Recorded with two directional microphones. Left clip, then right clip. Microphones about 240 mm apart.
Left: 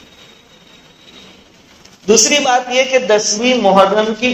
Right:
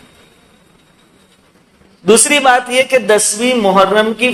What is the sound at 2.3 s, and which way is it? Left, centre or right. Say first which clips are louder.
A man's voice: right 3 dB; right.